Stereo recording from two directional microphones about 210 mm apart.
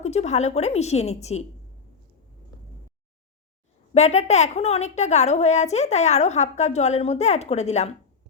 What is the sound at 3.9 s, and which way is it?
A woman's voice, 30° left (ahead or behind).